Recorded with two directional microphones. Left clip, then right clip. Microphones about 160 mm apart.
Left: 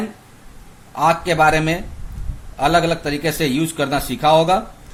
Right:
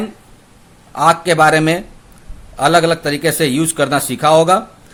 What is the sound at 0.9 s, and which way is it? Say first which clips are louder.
A man's voice: right 4 dB; 45° right (ahead or behind).